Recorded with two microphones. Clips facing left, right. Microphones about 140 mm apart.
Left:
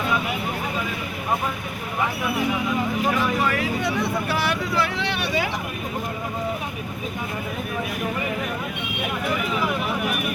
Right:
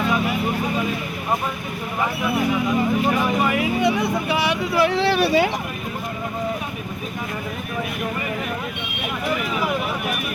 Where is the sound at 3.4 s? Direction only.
15° right (ahead or behind).